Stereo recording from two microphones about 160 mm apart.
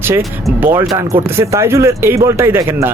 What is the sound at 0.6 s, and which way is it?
Speech, 15° right (ahead or behind).